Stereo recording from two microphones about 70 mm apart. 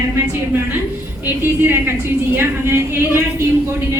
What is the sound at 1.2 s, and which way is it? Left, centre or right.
Speech, right.